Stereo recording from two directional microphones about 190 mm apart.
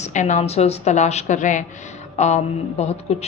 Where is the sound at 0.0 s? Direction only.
40° left (ahead or behind).